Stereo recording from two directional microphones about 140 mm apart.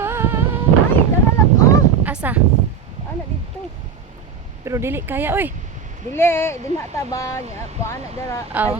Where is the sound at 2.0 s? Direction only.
10° right (ahead or behind).